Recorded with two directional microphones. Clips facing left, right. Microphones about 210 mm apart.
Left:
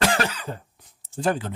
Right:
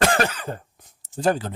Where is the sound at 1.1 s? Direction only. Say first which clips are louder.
Right 3 dB; 40° right (ahead or behind).